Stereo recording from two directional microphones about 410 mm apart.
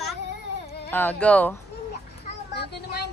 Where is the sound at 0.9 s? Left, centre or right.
Centre.